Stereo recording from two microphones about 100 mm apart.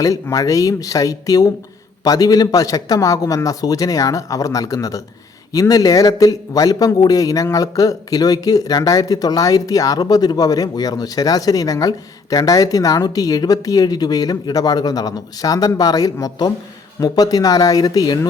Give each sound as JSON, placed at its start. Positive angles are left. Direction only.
{"t": 0.0, "sound": "a man's voice", "side_deg": 35}